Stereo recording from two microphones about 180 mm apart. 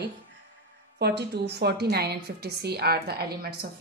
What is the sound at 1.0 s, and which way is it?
A woman's voice, 65° right (ahead or behind).